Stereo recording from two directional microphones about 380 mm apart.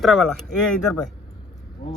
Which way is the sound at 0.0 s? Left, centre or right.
Centre.